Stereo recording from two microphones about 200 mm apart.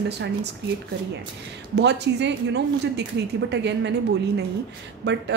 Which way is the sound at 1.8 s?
60° right (ahead or behind).